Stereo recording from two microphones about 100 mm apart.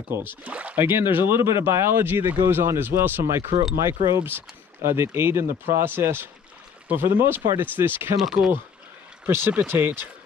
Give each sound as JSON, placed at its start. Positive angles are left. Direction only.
{"t": 0.1, "sound": "speech", "side_deg": -20}
{"t": 8.2, "sound": "speech", "side_deg": 0}
{"t": 9.2, "sound": "speech", "side_deg": -20}